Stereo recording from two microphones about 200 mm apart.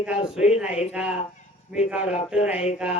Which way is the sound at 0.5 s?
5° right (ahead or behind).